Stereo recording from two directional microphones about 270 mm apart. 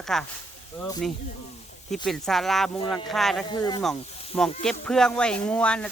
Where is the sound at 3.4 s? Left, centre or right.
Centre.